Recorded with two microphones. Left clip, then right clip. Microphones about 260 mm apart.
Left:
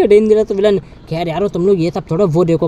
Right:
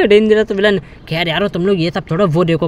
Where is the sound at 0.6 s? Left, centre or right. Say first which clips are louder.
Left 1 dB; centre.